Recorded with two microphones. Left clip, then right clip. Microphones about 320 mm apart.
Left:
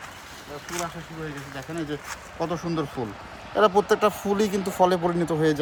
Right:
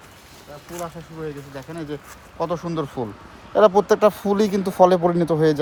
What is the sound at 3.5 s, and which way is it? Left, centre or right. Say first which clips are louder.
Speech: right 5 dB; right.